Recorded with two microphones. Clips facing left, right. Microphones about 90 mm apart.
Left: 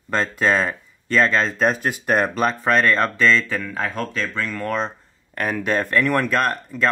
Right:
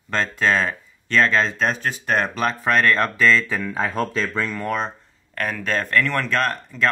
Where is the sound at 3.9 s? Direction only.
30° right (ahead or behind).